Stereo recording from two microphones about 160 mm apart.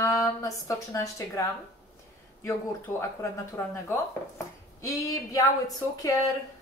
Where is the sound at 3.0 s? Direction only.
15° left (ahead or behind).